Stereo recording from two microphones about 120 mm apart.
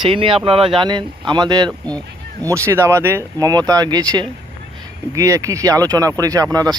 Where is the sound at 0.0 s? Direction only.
50° right (ahead or behind).